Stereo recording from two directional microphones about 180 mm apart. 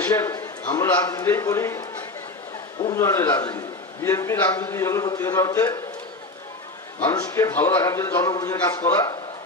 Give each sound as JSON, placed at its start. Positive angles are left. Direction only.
{"t": 0.0, "sound": "a man's voice", "side_deg": 15}
{"t": 2.9, "sound": "a man's voice", "side_deg": 15}
{"t": 7.0, "sound": "a man's voice", "side_deg": 15}